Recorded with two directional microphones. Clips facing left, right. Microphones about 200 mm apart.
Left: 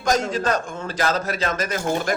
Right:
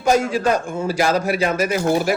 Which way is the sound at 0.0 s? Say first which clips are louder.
Right 4 dB; 10° right (ahead or behind).